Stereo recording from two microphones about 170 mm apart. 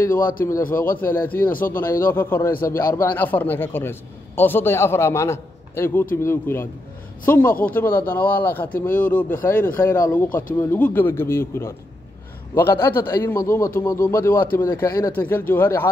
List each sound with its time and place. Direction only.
0.1 s a man's voice: 55° left (ahead or behind)
1.0 s speech: 10° left (ahead or behind)